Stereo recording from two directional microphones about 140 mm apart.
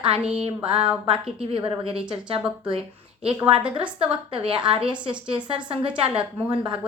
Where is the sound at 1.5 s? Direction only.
40° right (ahead or behind).